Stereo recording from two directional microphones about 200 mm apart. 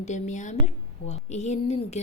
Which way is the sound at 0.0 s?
35° left (ahead or behind).